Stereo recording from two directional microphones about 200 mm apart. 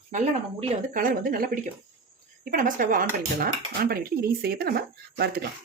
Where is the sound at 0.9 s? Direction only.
45° right (ahead or behind).